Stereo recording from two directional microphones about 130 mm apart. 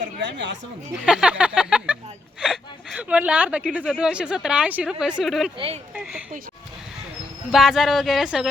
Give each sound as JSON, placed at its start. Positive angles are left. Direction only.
{"t": 1.0, "sound": "speech", "side_deg": -5}
{"t": 5.5, "sound": "speech", "side_deg": -45}
{"t": 5.9, "sound": "speech", "side_deg": -10}
{"t": 7.5, "sound": "speech", "side_deg": 0}